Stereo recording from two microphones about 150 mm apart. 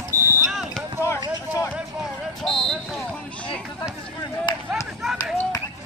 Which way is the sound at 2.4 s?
Centre (ahead or behind).